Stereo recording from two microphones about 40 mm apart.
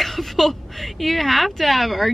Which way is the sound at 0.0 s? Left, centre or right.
Centre.